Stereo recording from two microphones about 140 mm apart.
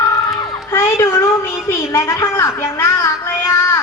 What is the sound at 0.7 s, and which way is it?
A woman's voice, 20° left (ahead or behind).